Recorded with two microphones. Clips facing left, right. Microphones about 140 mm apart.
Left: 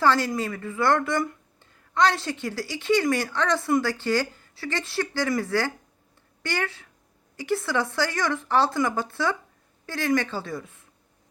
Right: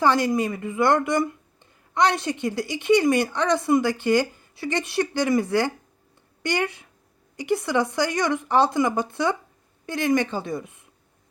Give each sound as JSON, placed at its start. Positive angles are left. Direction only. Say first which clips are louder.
{"t": 0.0, "sound": "a woman's voice", "louder": "right 2 dB", "side_deg": -15}